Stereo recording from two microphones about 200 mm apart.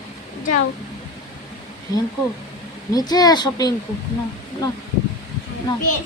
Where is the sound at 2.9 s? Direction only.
20° left (ahead or behind).